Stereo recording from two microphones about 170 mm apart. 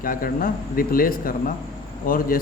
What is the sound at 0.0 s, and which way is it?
Speech, 55° left (ahead or behind).